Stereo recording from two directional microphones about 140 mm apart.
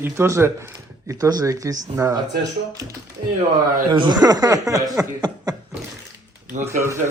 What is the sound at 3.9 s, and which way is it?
Speech, 30° right (ahead or behind).